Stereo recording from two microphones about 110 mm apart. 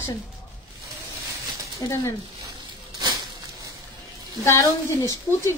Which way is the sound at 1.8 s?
30° left (ahead or behind).